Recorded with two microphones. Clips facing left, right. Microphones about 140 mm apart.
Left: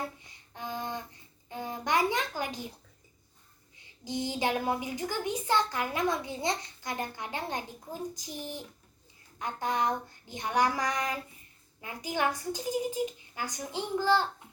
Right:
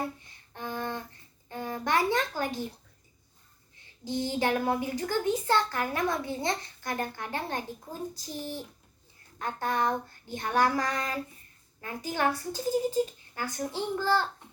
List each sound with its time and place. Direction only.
0.5 s music: 15° left (ahead or behind)
1.5 s a sound: 15° left (ahead or behind)
4.0 s a child's voice: 20° left (ahead or behind)